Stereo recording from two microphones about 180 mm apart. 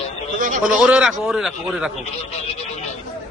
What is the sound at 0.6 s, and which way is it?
A man's voice, 5° right (ahead or behind).